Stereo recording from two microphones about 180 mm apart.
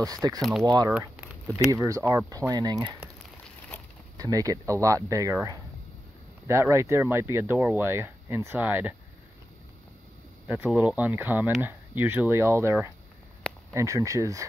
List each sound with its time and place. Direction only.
0.0 s speech: 20° right (ahead or behind)
0.4 s speech: centre (ahead or behind)
1.7 s speech: 15° right (ahead or behind)
4.2 s speech: 20° right (ahead or behind)
10.4 s speech: 5° right (ahead or behind)